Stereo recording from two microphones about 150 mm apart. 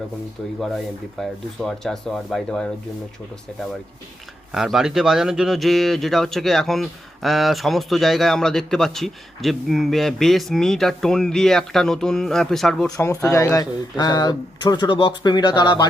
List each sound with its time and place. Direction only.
1.2 s speech: 5° left (ahead or behind)
4.5 s speech: 5° right (ahead or behind)
13.0 s speech: 20° left (ahead or behind)